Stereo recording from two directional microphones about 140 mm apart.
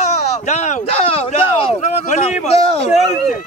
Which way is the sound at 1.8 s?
55° left (ahead or behind).